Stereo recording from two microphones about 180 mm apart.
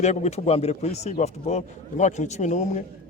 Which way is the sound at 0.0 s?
40° left (ahead or behind).